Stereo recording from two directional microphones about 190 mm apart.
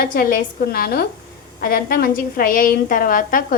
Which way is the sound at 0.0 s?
50° left (ahead or behind).